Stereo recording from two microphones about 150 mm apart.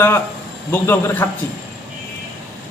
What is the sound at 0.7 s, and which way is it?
Speech, 15° left (ahead or behind).